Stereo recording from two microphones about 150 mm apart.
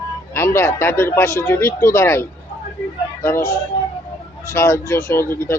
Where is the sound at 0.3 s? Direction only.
15° left (ahead or behind).